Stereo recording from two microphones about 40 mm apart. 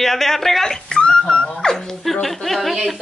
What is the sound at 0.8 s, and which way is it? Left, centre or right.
Dog, left.